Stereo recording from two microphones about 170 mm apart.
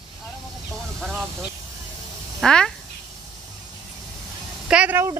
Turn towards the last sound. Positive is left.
turn(degrees=-10)  # may be behind; listen again after turning